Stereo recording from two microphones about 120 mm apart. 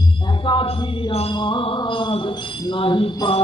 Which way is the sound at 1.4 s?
45° left (ahead or behind).